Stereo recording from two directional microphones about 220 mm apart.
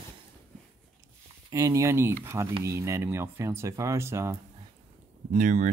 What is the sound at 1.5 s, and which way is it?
Speech, 15° right (ahead or behind).